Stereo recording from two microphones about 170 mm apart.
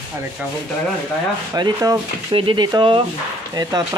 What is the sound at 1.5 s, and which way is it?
Speech, 20° right (ahead or behind).